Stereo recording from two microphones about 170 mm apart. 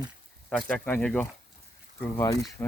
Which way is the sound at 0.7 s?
10° left (ahead or behind).